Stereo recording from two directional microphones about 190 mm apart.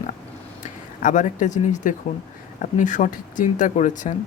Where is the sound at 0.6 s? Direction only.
40° left (ahead or behind).